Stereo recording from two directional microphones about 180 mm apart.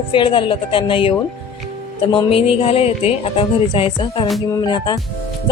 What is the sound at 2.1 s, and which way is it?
A woman's voice, 30° left (ahead or behind).